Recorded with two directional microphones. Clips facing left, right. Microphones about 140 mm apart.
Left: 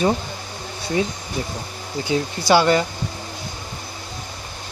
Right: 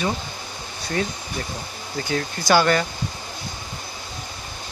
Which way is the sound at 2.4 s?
25° left (ahead or behind).